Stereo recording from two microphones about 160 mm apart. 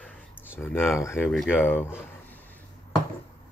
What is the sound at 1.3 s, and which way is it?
Speech, centre (ahead or behind).